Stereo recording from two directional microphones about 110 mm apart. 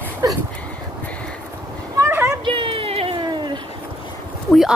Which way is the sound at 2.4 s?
50° right (ahead or behind).